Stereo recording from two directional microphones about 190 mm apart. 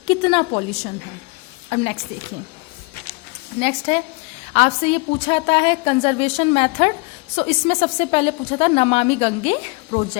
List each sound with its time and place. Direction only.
0.1 s a woman's voice: 25° left (ahead or behind)
1.7 s speech: 35° left (ahead or behind)
3.6 s speech: 30° left (ahead or behind)